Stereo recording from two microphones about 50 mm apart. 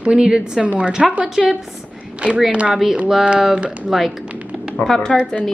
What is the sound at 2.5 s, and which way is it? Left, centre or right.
A woman's voice, right.